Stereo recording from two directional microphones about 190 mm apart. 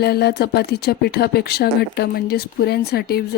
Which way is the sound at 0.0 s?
60° left (ahead or behind).